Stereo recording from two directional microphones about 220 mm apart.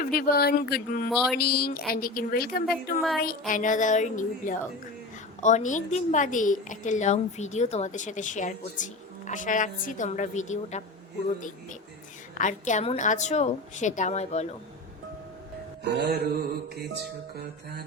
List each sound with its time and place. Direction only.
0.0 s speech: 40° left (ahead or behind)
1.1 s a sound: centre (ahead or behind)
1.4 s a woman's voice: 45° left (ahead or behind)
12.3 s a woman's voice: 35° left (ahead or behind)
15.8 s music: 50° right (ahead or behind)